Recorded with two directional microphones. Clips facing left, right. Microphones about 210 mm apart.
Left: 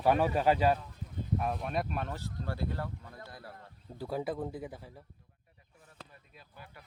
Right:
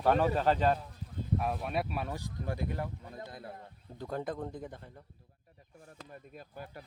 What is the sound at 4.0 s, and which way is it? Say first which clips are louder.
Speech: left 2 dB; 5° left (ahead or behind).